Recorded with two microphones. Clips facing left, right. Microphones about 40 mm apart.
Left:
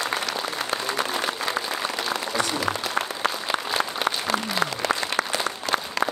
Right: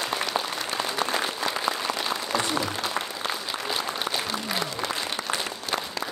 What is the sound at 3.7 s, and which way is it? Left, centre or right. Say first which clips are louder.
Applause: left 2 dB; left.